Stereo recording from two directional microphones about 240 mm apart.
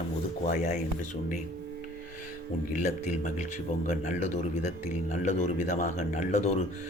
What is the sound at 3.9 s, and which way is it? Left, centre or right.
A man's voice, left.